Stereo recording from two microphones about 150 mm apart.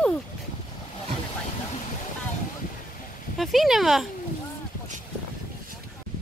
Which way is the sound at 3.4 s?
Centre (ahead or behind).